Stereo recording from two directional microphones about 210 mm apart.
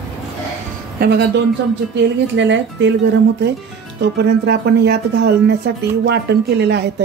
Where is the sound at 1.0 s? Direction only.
55° right (ahead or behind).